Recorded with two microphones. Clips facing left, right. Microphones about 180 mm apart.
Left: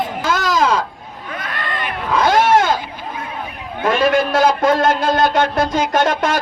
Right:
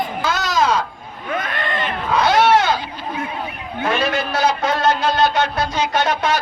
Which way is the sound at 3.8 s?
50° left (ahead or behind).